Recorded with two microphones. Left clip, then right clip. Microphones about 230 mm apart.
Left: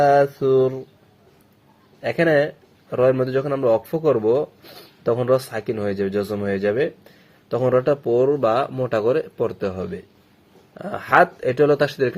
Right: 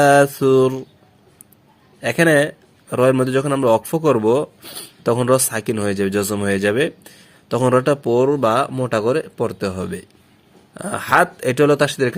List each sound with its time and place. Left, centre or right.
0.0 s a man's voice: right
2.0 s a man's voice: right